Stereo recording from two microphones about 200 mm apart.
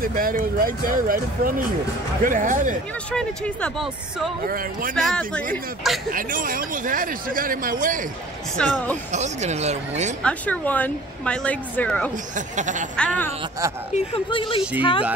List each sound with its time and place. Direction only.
0.0 s speech: 45° right (ahead or behind)
3.1 s speech: 5° left (ahead or behind)
4.5 s speech: 45° right (ahead or behind)
4.9 s speech: 5° left (ahead or behind)
6.1 s speech: 45° right (ahead or behind)
8.6 s speech: 5° left (ahead or behind)
9.1 s speech: 35° right (ahead or behind)
10.2 s speech: 5° left (ahead or behind)
12.4 s speech: 40° right (ahead or behind)
12.9 s speech: 5° left (ahead or behind)
13.9 s speech: 25° left (ahead or behind)